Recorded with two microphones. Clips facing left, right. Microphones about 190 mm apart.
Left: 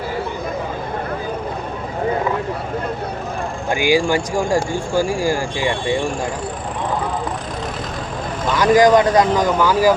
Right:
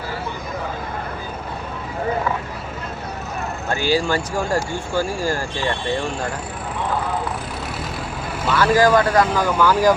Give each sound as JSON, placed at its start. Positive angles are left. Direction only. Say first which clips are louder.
{"t": 3.7, "sound": "speech", "louder": "left 4 dB", "side_deg": 15}
{"t": 8.4, "sound": "speech", "louder": "left 3 dB", "side_deg": 15}